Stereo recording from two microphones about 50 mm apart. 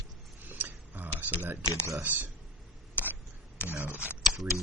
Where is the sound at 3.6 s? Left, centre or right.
Right.